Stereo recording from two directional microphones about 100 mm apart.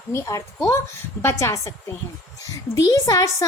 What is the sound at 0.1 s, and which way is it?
A woman's voice, 30° left (ahead or behind).